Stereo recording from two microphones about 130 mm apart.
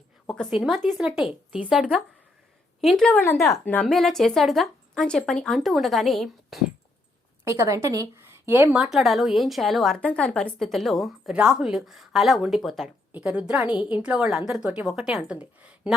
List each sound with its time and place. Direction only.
0.9 s a woman's voice: centre (ahead or behind)
3.3 s a woman's voice: centre (ahead or behind)
3.7 s a woman's voice: 10° left (ahead or behind)
7.4 s a woman's voice: 25° right (ahead or behind)
8.8 s a woman's voice: centre (ahead or behind)